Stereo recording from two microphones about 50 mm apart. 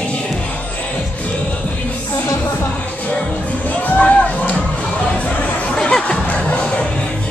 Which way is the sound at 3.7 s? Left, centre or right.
Left.